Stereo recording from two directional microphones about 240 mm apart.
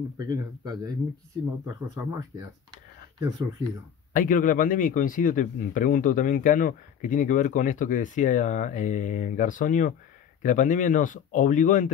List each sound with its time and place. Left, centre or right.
0.3 s speech: centre
2.0 s speech: centre
4.1 s a man's voice: left